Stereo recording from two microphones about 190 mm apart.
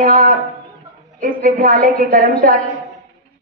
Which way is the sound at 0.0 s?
45° right (ahead or behind).